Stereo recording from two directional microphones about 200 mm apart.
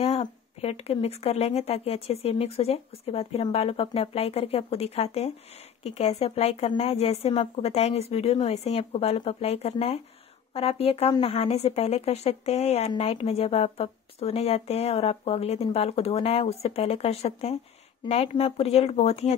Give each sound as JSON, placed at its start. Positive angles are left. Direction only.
{"t": 0.0, "sound": "a woman's voice", "side_deg": 30}